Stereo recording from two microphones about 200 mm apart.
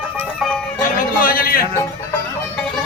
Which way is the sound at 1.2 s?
45° left (ahead or behind).